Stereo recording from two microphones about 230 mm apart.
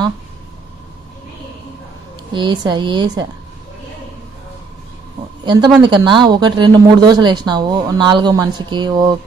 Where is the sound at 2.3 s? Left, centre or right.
Centre.